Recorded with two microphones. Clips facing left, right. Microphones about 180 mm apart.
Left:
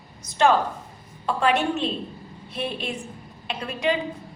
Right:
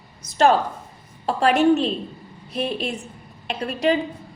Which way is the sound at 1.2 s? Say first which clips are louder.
Right 5 dB; 40° right (ahead or behind).